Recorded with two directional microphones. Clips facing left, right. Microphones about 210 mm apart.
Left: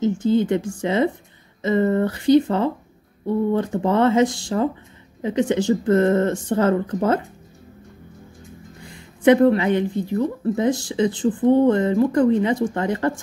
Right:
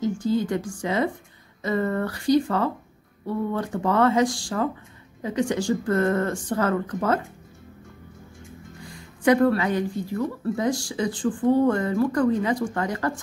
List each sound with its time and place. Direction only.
0.0 s speech: 25° left (ahead or behind)
8.9 s speech: 25° left (ahead or behind)